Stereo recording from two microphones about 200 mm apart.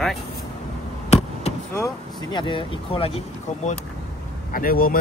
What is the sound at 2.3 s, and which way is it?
Speech, 25° left (ahead or behind).